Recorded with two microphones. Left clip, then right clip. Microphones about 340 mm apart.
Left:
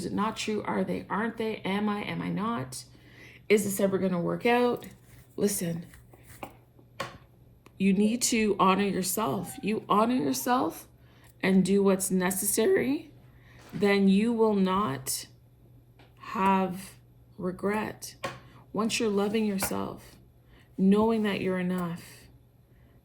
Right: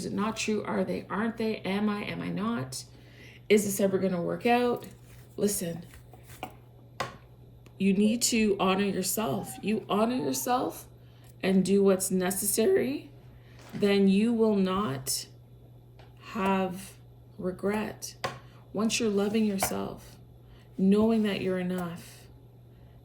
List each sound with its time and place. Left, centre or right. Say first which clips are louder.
0.0 s speech: left 1 dB; centre
7.8 s speech: even; centre